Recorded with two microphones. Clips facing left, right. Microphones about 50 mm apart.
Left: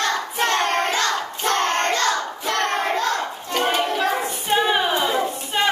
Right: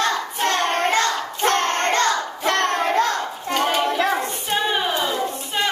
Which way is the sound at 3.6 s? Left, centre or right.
Centre.